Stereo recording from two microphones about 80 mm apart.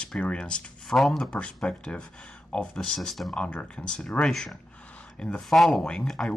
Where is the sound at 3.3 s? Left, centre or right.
Centre.